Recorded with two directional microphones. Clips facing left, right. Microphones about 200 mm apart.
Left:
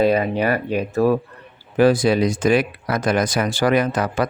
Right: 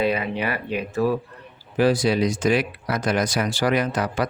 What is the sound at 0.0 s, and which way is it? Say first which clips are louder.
Speech: left 6 dB; 40° left (ahead or behind).